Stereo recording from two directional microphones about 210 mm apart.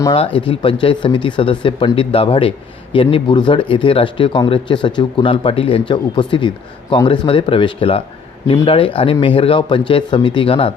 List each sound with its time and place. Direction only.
0.0 s speech: 25° left (ahead or behind)